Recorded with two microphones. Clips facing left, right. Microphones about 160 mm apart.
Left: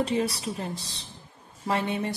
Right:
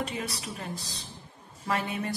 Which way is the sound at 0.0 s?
30° left (ahead or behind).